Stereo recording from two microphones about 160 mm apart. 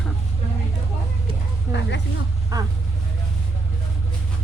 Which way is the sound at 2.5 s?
20° right (ahead or behind).